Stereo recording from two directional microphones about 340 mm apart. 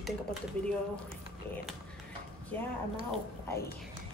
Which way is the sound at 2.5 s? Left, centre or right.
Centre.